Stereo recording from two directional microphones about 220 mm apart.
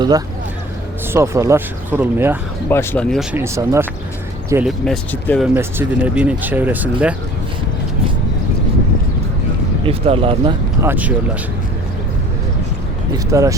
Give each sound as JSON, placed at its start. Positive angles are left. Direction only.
{"t": 1.1, "sound": "speech", "side_deg": -10}
{"t": 2.6, "sound": "speech", "side_deg": 10}
{"t": 3.3, "sound": "speech", "side_deg": -10}
{"t": 4.6, "sound": "speech", "side_deg": 5}
{"t": 5.5, "sound": "speech", "side_deg": -10}
{"t": 9.8, "sound": "speech", "side_deg": -25}
{"t": 10.8, "sound": "speech", "side_deg": -5}
{"t": 13.3, "sound": "speech", "side_deg": -15}